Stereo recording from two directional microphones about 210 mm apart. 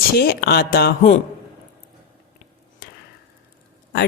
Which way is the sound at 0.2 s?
50° left (ahead or behind).